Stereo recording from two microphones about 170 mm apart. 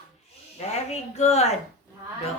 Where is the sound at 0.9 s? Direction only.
40° left (ahead or behind).